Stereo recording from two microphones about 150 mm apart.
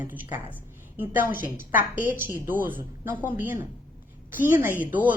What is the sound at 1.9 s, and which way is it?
A woman's voice, 10° right (ahead or behind).